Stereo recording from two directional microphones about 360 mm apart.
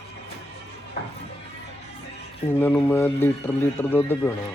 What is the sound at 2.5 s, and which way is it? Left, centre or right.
A man's voice, centre.